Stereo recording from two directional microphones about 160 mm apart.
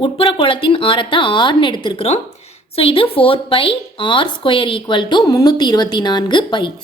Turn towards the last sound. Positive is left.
turn(degrees=30)  # may be behind; listen again after turning